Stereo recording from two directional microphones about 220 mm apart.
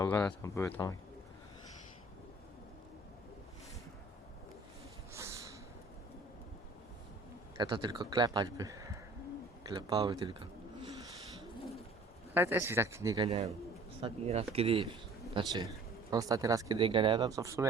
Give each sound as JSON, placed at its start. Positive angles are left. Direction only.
{"t": 0.0, "sound": "speech", "side_deg": 5}
{"t": 5.1, "sound": "snort", "side_deg": -15}
{"t": 7.6, "sound": "speech", "side_deg": -20}
{"t": 12.3, "sound": "speech", "side_deg": -10}